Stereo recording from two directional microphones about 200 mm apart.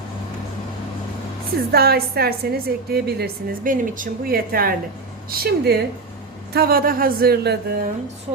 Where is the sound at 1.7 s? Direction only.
50° right (ahead or behind).